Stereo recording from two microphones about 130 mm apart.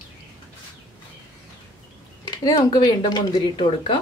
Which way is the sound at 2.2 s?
30° left (ahead or behind).